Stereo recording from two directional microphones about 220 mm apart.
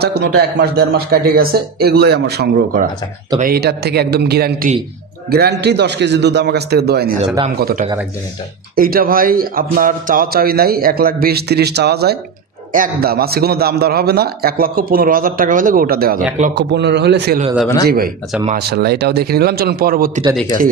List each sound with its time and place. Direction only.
0.0 s a man's voice: 45° right (ahead or behind)